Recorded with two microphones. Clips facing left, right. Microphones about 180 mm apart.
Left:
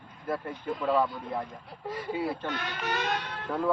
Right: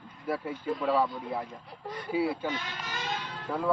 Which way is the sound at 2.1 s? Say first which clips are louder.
Right 5 dB; 5° right (ahead or behind).